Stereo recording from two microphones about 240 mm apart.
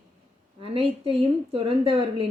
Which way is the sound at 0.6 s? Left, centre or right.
Right.